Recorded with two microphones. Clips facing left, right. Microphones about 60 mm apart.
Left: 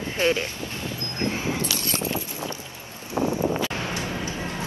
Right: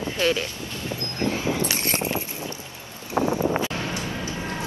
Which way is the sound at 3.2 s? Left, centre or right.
Right.